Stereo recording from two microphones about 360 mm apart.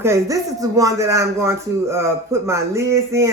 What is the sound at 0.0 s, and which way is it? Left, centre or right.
Speech, centre.